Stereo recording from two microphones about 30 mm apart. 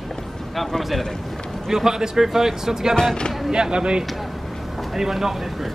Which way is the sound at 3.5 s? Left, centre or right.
Right.